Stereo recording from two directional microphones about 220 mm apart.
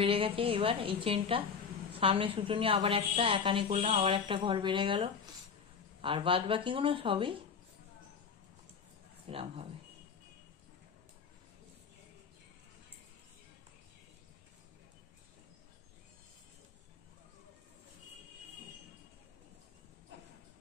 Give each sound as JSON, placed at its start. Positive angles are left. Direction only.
{"t": 0.0, "sound": "a woman's voice", "side_deg": -25}
{"t": 9.3, "sound": "a woman's voice", "side_deg": -25}